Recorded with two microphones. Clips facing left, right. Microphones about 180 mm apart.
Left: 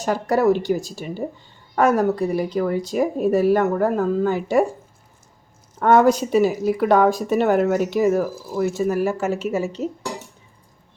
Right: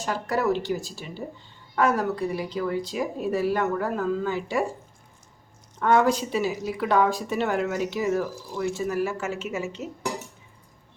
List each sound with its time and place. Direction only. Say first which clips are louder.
0.0 s speech: left 7 dB; 45° left (ahead or behind)
5.8 s speech: left 6 dB; 45° left (ahead or behind)